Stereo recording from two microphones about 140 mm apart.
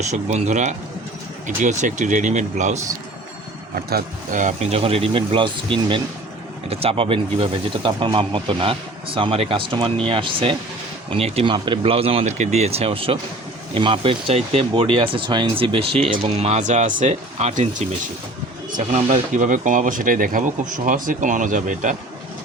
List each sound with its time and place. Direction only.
0.0 s speech: 55° right (ahead or behind)
3.9 s speech: 70° right (ahead or behind)
19.3 s speech: 65° right (ahead or behind)